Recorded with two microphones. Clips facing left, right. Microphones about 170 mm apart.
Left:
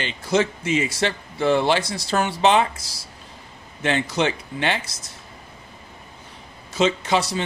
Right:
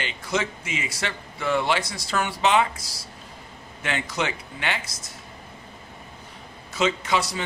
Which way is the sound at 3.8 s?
30° left (ahead or behind).